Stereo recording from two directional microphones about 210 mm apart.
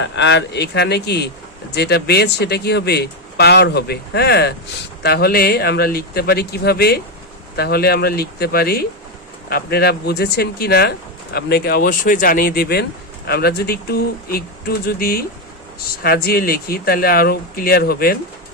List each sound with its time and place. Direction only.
0.0 s speech: 60° left (ahead or behind)